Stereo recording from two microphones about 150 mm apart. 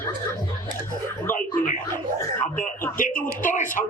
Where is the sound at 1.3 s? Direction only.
60° left (ahead or behind).